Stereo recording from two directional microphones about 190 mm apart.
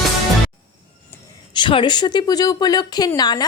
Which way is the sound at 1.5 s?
25° left (ahead or behind).